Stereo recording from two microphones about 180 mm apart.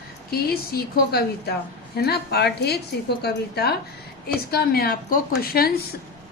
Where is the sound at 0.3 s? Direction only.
60° left (ahead or behind).